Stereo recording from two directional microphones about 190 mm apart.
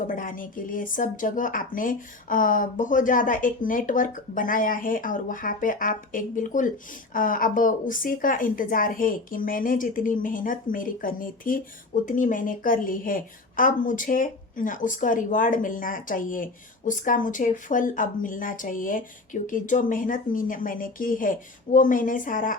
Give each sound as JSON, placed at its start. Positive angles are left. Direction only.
{"t": 0.0, "sound": "a woman's voice", "side_deg": 45}